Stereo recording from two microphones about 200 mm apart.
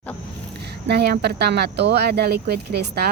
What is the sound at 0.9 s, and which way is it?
Speech, 55° right (ahead or behind).